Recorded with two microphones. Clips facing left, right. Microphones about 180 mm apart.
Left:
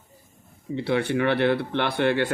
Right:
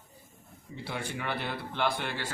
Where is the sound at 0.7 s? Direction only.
70° left (ahead or behind).